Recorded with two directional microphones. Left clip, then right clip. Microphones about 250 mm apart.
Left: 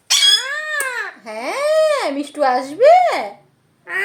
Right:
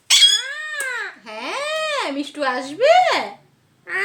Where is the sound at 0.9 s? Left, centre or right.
Centre.